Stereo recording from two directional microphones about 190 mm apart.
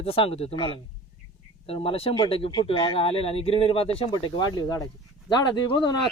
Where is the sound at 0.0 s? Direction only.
30° left (ahead or behind).